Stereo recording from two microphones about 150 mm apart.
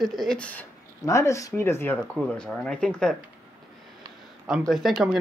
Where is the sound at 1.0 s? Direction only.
20° left (ahead or behind); by 3.2 s 5° left (ahead or behind).